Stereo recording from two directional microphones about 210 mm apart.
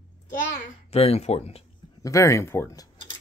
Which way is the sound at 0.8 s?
30° left (ahead or behind).